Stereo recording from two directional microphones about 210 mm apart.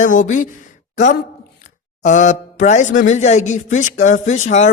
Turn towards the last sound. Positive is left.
turn(degrees=35)  # may be behind; listen again after turning